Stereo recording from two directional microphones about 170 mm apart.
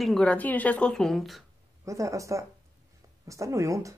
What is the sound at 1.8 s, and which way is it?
Speech, 20° right (ahead or behind).